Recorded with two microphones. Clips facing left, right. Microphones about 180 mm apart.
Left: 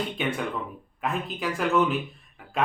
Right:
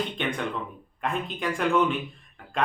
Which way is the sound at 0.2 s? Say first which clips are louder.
Left 1 dB; 5° left (ahead or behind).